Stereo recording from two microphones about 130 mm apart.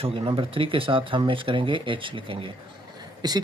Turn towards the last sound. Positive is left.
turn(degrees=-30)  # may be behind; listen again after turning